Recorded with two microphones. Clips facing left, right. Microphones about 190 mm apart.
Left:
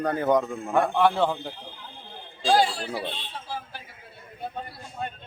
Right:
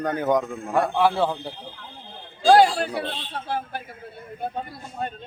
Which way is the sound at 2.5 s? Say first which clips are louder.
Right 6 dB; 60° right (ahead or behind).